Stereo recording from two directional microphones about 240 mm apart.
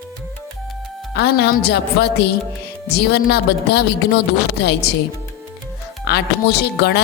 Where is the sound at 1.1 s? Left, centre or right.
Left.